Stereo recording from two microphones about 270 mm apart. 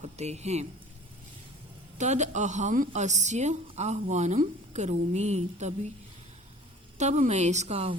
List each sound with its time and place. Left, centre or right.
0.0 s a woman's voice: right
2.0 s a woman's voice: right
7.0 s a woman's voice: right